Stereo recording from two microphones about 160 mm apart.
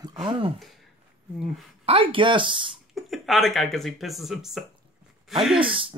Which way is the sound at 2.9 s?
Centre (ahead or behind).